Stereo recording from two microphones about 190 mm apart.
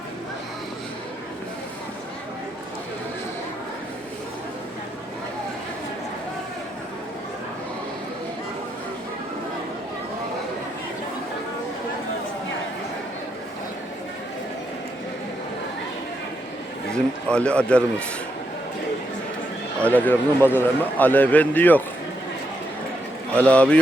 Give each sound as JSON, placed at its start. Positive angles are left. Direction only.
{"t": 16.9, "sound": "a man's voice", "side_deg": 5}
{"t": 19.8, "sound": "a man's voice", "side_deg": 10}
{"t": 23.3, "sound": "a man's voice", "side_deg": 5}